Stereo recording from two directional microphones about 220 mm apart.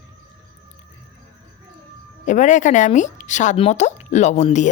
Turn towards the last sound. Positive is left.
turn(degrees=30)  # may be behind; listen again after turning